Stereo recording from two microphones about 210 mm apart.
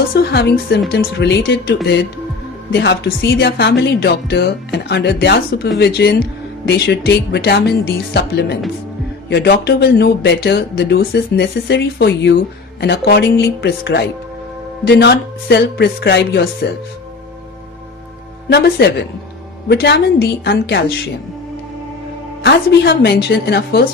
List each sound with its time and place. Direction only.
0.1 s speech: 50° left (ahead or behind)
18.4 s speech: 50° left (ahead or behind)
22.4 s speech: 50° left (ahead or behind)